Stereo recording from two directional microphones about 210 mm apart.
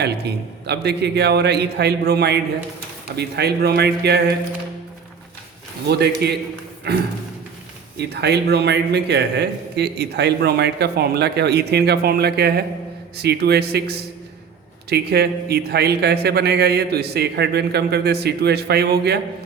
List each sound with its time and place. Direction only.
0.0 s a man's voice: 50° right (ahead or behind)
5.9 s a man's voice: 50° right (ahead or behind)